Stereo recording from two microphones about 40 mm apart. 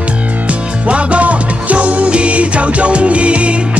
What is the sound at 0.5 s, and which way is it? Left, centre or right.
Music, right.